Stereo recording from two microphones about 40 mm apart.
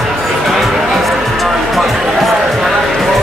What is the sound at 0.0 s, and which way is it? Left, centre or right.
Music, centre.